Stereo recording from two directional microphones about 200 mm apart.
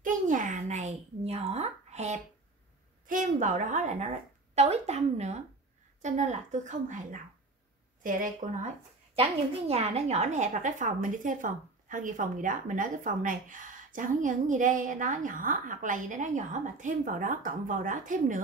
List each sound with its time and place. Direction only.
0.0 s a sound: 40° right (ahead or behind)
3.1 s a woman's voice: 40° right (ahead or behind)
9.1 s a woman's voice: 30° right (ahead or behind)